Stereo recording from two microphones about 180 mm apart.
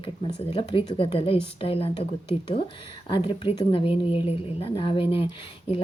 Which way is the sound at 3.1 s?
30° left (ahead or behind).